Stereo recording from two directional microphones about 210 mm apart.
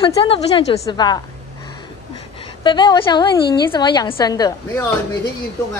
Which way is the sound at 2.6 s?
20° left (ahead or behind).